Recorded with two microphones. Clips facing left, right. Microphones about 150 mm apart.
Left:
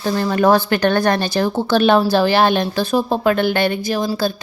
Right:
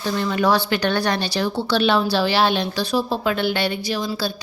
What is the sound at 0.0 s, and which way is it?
Speech, 40° left (ahead or behind).